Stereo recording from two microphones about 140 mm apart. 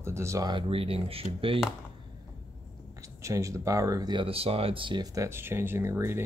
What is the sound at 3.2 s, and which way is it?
Speech, 20° right (ahead or behind).